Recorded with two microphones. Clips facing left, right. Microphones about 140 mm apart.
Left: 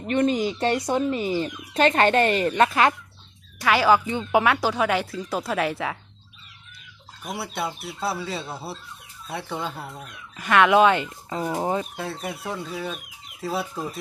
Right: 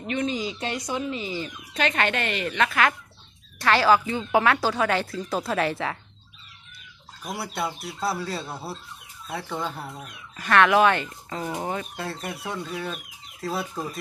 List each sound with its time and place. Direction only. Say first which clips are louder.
0.1 s speech: left 6 dB; 50° left (ahead or behind)
0.6 s speech: left 7 dB; 30° left (ahead or behind)
0.9 s speech: left 6 dB; 45° left (ahead or behind); by 2.9 s 30° left (ahead or behind)
3.6 s speech: left 1 dB; 10° left (ahead or behind)
7.2 s speech: even; centre (ahead or behind)
10.3 s speech: left 1 dB; 15° left (ahead or behind)
11.9 s speech: left 1 dB; centre (ahead or behind)